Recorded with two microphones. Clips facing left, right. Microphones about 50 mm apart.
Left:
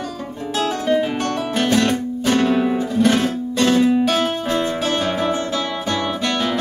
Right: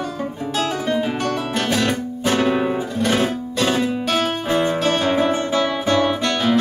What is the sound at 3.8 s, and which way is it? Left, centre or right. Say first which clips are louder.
Music: left 4 dB; centre.